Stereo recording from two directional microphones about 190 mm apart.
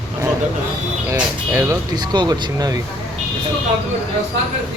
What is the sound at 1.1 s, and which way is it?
Speech, 15° right (ahead or behind).